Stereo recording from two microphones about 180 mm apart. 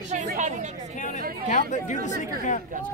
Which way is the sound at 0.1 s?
40° right (ahead or behind).